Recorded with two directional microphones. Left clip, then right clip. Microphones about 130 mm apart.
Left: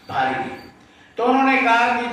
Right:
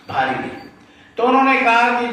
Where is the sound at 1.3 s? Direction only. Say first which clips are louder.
Right 3 dB; 25° right (ahead or behind).